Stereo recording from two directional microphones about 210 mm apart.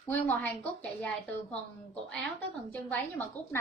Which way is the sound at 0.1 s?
10° left (ahead or behind).